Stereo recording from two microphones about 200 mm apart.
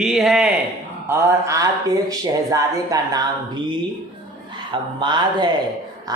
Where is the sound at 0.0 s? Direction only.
Centre (ahead or behind).